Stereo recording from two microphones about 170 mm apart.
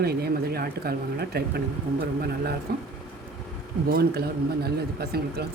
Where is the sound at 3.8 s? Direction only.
65° right (ahead or behind).